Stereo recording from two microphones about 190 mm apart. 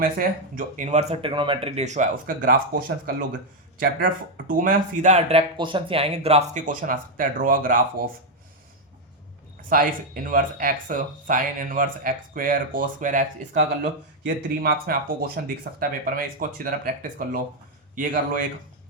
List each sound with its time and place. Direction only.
0.0 s speech: 45° right (ahead or behind)
3.8 s speech: 45° right (ahead or behind)
5.5 s speech: 25° right (ahead or behind); by 7.8 s 45° right (ahead or behind)
9.6 s speech: 45° right (ahead or behind)
14.3 s speech: 55° right (ahead or behind)